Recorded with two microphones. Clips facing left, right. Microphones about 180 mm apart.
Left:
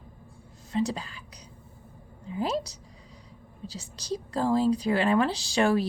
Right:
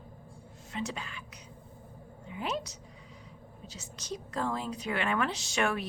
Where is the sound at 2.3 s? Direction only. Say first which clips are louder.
Left 6 dB; 35° left (ahead or behind).